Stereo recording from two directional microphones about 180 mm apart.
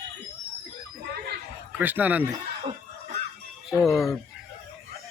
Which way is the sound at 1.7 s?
10° right (ahead or behind).